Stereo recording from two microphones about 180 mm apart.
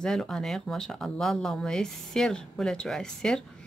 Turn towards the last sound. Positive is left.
turn(degrees=5)  # may be behind; listen again after turning